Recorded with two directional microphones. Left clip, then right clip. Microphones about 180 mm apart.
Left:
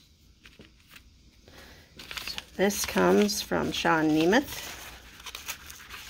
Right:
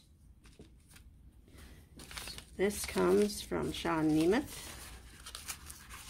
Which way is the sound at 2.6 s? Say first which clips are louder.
Left 7 dB; 55° left (ahead or behind).